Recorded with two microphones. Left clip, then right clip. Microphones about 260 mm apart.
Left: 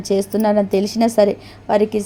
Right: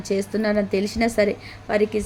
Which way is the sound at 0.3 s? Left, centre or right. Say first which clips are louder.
Left 6 dB; centre.